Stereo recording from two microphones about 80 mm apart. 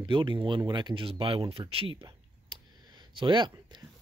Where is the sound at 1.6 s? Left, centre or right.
Right.